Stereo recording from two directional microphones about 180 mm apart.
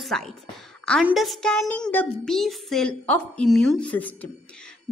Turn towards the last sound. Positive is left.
turn(degrees=10)  # may be behind; listen again after turning